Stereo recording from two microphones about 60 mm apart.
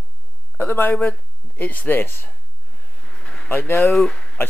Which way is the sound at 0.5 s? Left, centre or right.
Left.